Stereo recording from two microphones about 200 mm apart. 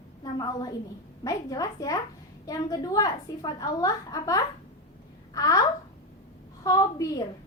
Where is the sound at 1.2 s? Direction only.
15° left (ahead or behind).